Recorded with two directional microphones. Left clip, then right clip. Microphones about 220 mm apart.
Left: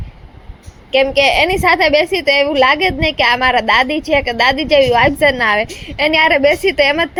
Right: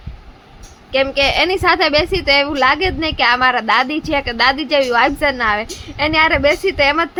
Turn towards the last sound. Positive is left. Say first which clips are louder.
# left 2 dB
turn(degrees=10)  # may be behind; listen again after turning